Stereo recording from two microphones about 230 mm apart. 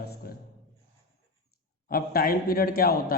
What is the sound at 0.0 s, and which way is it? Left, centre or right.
Music, left.